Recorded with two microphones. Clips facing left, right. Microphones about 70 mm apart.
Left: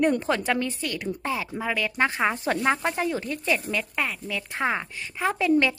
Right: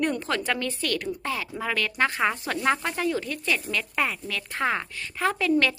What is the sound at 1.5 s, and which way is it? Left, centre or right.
A woman's voice, centre.